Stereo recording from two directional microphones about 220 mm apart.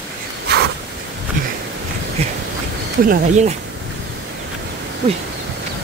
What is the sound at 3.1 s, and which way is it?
Speech, 30° right (ahead or behind).